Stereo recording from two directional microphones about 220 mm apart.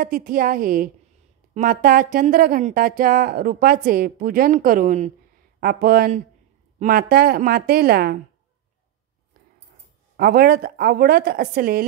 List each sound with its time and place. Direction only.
0.0 s a woman's voice: 40° right (ahead or behind)
10.1 s a woman's voice: 45° right (ahead or behind)